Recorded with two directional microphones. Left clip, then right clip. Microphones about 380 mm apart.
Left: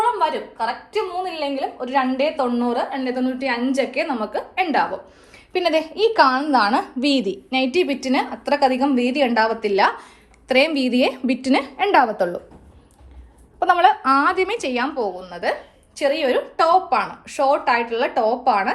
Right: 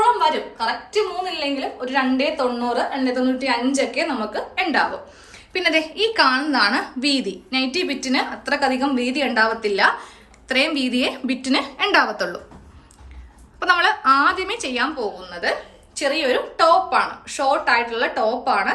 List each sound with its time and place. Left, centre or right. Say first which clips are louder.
0.2 s a woman's voice: right 1 dB; centre
13.6 s a woman's voice: left 2 dB; centre